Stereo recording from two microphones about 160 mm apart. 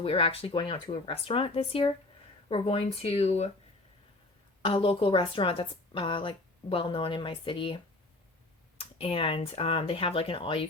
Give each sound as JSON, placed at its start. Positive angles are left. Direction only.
{"t": 0.0, "sound": "a woman's voice", "side_deg": 35}
{"t": 4.6, "sound": "a woman's voice", "side_deg": 35}
{"t": 8.8, "sound": "a woman's voice", "side_deg": 35}